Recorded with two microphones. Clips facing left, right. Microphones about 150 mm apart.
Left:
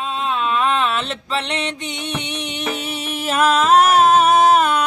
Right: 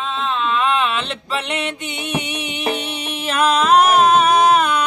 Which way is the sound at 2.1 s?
5° right (ahead or behind).